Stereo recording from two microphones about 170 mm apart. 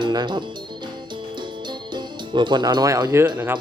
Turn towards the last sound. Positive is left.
turn(degrees=-10)  # may be behind; listen again after turning